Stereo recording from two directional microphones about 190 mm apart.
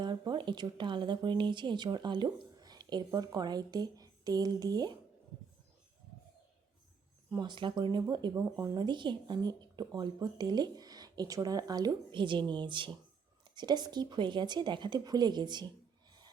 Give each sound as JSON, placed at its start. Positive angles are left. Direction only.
{"t": 0.0, "sound": "speech", "side_deg": -25}
{"t": 7.3, "sound": "speech", "side_deg": -25}